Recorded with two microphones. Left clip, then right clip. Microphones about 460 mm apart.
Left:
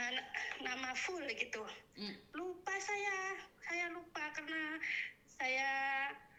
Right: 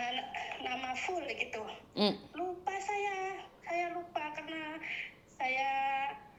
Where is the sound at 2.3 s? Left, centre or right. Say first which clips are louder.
Right 5 dB; left.